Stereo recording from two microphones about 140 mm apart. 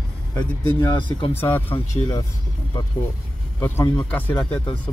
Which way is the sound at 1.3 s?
15° left (ahead or behind).